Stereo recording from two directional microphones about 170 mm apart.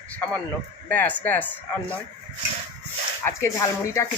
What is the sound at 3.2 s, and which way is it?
Speech, 15° left (ahead or behind).